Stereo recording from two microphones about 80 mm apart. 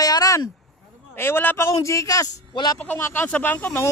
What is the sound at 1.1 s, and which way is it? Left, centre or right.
A man's voice, left.